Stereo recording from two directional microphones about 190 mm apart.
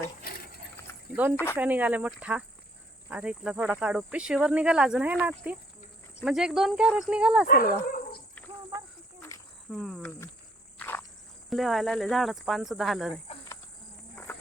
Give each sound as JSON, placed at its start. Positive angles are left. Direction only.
{"t": 1.5, "sound": "speech", "side_deg": -10}
{"t": 7.4, "sound": "speech", "side_deg": 50}
{"t": 9.3, "sound": "cricket", "side_deg": 15}
{"t": 9.6, "sound": "speech", "side_deg": 0}
{"t": 10.8, "sound": "cricket", "side_deg": 10}
{"t": 11.4, "sound": "speech", "side_deg": 0}